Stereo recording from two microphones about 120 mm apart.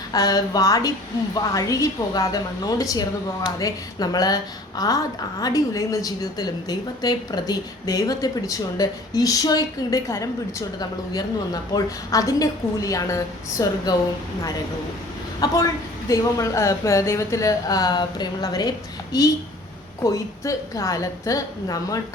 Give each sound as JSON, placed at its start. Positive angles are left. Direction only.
{"t": 0.1, "sound": "a woman's voice", "side_deg": 30}
{"t": 5.4, "sound": "a woman's voice", "side_deg": 30}
{"t": 15.4, "sound": "a woman's voice", "side_deg": 30}